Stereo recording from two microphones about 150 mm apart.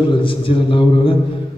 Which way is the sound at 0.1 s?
35° left (ahead or behind).